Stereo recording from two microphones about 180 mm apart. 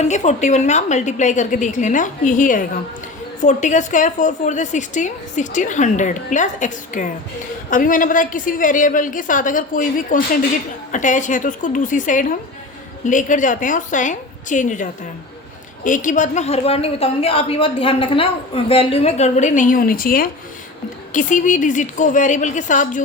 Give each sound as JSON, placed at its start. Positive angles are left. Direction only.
{"t": 0.0, "sound": "a woman's voice", "side_deg": 40}